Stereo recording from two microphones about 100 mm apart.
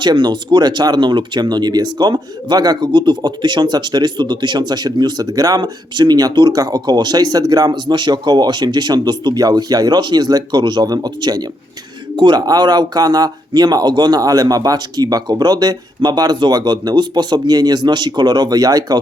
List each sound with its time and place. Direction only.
0.0 s speech: 50° right (ahead or behind)